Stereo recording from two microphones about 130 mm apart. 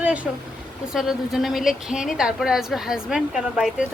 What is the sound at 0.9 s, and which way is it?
A woman's voice, centre (ahead or behind).